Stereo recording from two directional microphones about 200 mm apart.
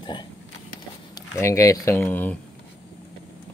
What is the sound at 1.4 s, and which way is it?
Speech, 15° left (ahead or behind).